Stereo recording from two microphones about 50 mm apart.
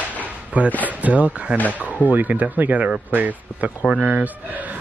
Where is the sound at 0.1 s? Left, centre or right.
Right.